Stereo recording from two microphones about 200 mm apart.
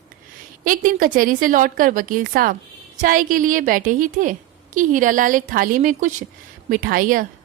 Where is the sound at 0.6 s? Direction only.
40° right (ahead or behind).